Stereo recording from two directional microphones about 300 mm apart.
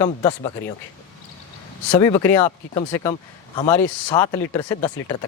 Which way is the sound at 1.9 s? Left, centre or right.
Centre.